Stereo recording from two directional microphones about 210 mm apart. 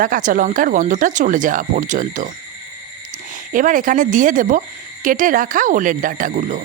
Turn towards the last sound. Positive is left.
turn(degrees=-40)  # may be behind; listen again after turning